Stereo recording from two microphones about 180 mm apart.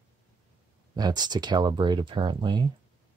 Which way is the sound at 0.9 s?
20° right (ahead or behind).